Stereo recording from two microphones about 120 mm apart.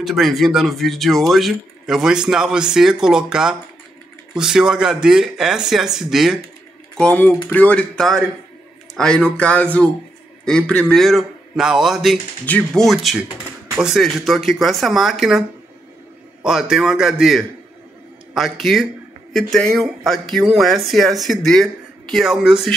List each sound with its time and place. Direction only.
0.0 s speech: centre (ahead or behind)
7.0 s speech: 10° left (ahead or behind)
12.4 s speech: 10° left (ahead or behind)
12.8 s speech: centre (ahead or behind)
16.4 s speech: 5° right (ahead or behind)